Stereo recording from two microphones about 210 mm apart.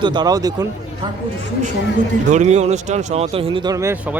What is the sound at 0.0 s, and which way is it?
Speech, 20° right (ahead or behind).